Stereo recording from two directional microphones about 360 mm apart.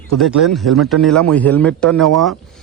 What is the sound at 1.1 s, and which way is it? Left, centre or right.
Speech, right.